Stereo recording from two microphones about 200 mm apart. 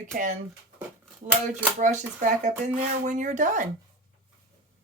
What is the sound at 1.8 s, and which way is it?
Speech, 40° right (ahead or behind).